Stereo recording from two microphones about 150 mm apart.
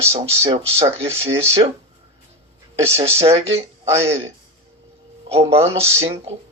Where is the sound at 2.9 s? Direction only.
40° right (ahead or behind).